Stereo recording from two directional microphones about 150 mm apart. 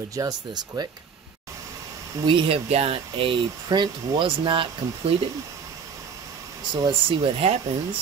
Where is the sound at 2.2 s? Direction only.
35° right (ahead or behind).